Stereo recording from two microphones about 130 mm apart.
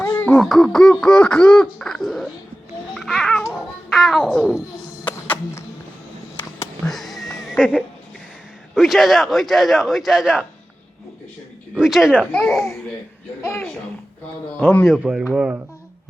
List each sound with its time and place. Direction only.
0.0 s music: 15° left (ahead or behind)
0.3 s a man's voice: centre (ahead or behind)
2.9 s babbling: centre (ahead or behind)
3.5 s a child's voice: centre (ahead or behind)
5.0 s music: 15° left (ahead or behind)
6.8 s a sound: centre (ahead or behind)
8.7 s a man's voice: centre (ahead or behind)
11.7 s a man's voice: centre (ahead or behind)
12.3 s speech: 10° left (ahead or behind)
13.4 s speech: 20° left (ahead or behind)
14.8 s a man's voice: 5° right (ahead or behind)